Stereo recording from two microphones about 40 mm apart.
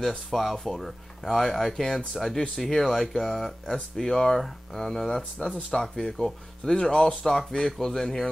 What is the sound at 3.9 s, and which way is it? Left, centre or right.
Speech, centre.